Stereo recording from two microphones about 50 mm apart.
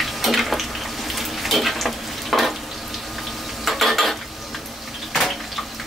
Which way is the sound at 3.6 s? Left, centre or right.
Centre.